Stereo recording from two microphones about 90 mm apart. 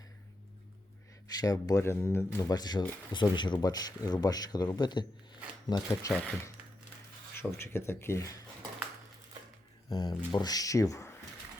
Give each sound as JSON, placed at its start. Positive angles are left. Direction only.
{"t": 1.4, "sound": "speech", "side_deg": 45}
{"t": 1.8, "sound": "speech", "side_deg": 25}
{"t": 2.4, "sound": "speech", "side_deg": 45}
{"t": 3.1, "sound": "speech", "side_deg": 60}
{"t": 6.0, "sound": "speech", "side_deg": 40}
{"t": 7.3, "sound": "speech", "side_deg": 30}
{"t": 9.9, "sound": "speech", "side_deg": 55}